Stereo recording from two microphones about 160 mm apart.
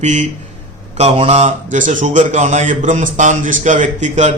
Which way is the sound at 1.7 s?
55° right (ahead or behind).